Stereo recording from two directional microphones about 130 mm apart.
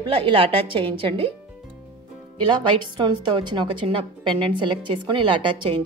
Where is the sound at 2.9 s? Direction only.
35° right (ahead or behind).